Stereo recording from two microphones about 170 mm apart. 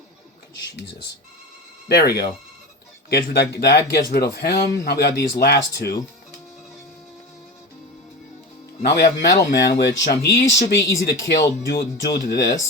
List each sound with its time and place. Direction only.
1.9 s speech: 70° left (ahead or behind)
8.8 s speech: 70° left (ahead or behind)
9.1 s speech: 90° left
9.5 s speech: 80° left
10.1 s speech: 20° left (ahead or behind)
11.0 s speech: 75° left (ahead or behind)
12.3 s speech: 90° left